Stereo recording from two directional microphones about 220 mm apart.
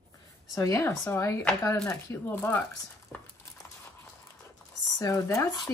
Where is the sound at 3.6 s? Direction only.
10° left (ahead or behind).